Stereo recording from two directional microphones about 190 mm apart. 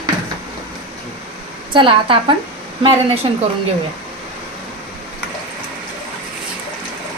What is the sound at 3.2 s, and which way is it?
Speech, 25° right (ahead or behind).